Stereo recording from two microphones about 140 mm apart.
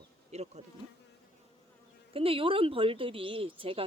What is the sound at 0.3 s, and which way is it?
Speech, 50° right (ahead or behind).